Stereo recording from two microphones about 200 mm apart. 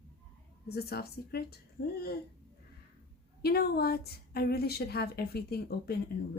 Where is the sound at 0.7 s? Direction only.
50° left (ahead or behind).